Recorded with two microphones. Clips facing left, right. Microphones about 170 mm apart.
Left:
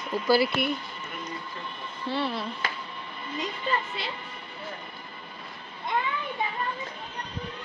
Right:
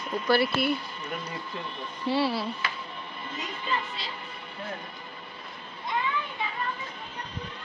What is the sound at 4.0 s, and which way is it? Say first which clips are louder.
Speech: left 4 dB; 55° left (ahead or behind).